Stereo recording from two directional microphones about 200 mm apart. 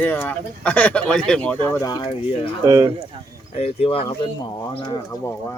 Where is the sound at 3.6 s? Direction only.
30° left (ahead or behind).